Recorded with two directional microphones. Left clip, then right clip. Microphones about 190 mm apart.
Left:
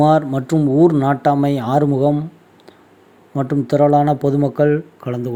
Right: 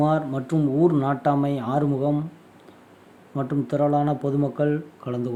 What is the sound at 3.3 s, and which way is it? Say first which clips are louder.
Speech: left 8 dB; 25° left (ahead or behind).